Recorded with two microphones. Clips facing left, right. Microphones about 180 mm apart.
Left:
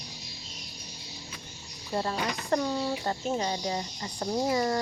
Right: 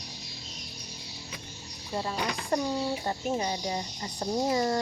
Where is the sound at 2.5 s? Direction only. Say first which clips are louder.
Left 1 dB; 15° right (ahead or behind).